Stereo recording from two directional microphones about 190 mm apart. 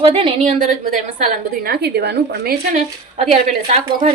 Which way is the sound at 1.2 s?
50° right (ahead or behind).